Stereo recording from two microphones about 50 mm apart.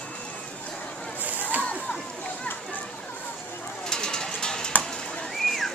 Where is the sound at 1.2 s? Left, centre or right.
Right.